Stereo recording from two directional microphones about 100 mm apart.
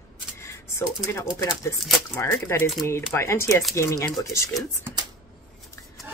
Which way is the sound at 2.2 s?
25° left (ahead or behind).